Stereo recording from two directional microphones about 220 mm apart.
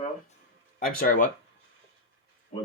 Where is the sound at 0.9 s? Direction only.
40° left (ahead or behind).